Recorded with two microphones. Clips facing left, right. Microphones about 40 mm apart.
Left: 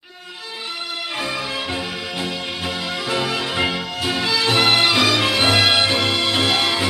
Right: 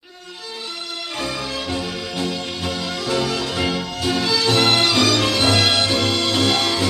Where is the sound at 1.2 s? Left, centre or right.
Centre.